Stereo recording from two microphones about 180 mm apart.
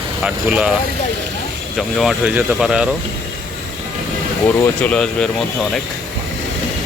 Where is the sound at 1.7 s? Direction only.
Centre (ahead or behind).